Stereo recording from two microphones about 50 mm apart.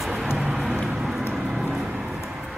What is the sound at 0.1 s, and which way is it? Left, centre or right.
Vehicle, centre.